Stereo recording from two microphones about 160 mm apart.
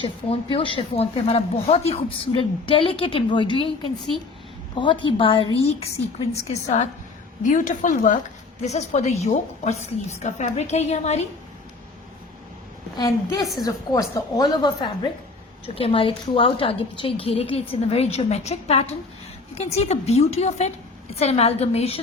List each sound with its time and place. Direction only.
0.0 s speech: 35° left (ahead or behind)
4.8 s a woman's voice: 30° left (ahead or behind)
13.6 s a woman's voice: 25° left (ahead or behind); by 22.0 s 40° left (ahead or behind)